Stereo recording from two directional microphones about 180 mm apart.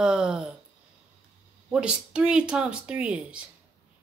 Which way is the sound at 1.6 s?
5° right (ahead or behind).